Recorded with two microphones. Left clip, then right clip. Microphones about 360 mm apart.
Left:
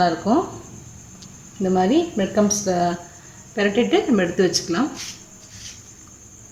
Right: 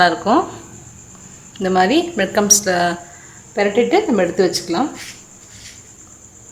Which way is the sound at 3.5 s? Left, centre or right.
Centre.